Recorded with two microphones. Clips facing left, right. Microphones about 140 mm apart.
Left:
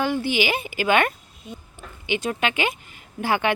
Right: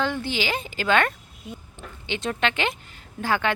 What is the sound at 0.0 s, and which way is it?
A woman's voice, 10° left (ahead or behind).